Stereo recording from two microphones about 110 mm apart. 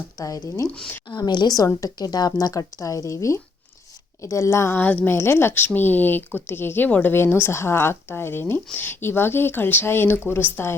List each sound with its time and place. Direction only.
0.2 s a woman's voice: 30° left (ahead or behind)
0.7 s a woman's voice: 10° left (ahead or behind)
1.0 s a woman's voice: 40° left (ahead or behind); by 10.8 s 20° left (ahead or behind)